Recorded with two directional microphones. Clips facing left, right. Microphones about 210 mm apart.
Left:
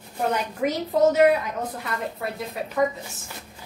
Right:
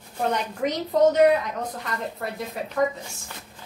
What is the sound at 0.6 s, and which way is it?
Speech, 5° left (ahead or behind).